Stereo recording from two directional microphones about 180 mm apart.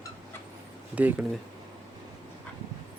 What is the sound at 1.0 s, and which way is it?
Speech, 10° right (ahead or behind).